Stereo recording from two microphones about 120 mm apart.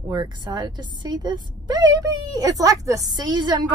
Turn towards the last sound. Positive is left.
turn(degrees=-40)  # may be behind; listen again after turning